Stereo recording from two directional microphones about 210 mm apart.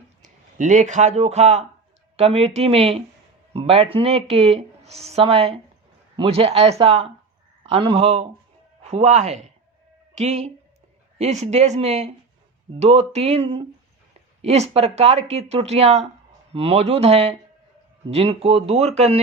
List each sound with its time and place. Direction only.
0.2 s speech: 35° right (ahead or behind)